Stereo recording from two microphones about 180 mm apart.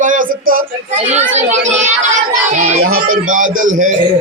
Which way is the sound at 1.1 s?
40° right (ahead or behind).